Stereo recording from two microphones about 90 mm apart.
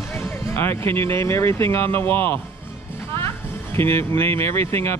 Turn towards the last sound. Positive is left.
turn(degrees=30)  # may be behind; listen again after turning